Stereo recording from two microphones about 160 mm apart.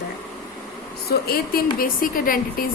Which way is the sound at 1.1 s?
70° left (ahead or behind).